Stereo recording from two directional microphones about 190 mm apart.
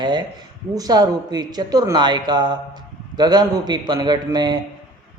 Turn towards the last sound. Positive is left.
turn(degrees=-20)  # may be behind; listen again after turning